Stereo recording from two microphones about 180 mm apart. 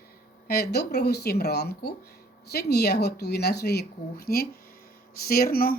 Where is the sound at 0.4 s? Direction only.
60° left (ahead or behind).